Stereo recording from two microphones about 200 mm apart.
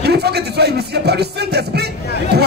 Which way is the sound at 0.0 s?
55° right (ahead or behind).